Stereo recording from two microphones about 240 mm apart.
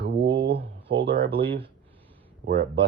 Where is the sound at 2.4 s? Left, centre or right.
Right.